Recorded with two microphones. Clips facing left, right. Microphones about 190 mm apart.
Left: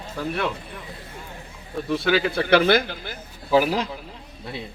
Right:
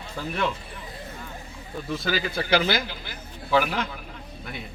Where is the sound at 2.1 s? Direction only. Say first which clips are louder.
Left 5 dB; 65° left (ahead or behind).